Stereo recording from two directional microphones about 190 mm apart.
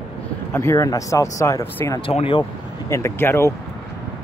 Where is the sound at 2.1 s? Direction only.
30° left (ahead or behind); by 3.5 s 15° left (ahead or behind).